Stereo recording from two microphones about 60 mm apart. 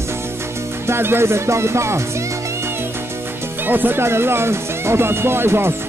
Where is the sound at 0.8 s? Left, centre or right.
Right.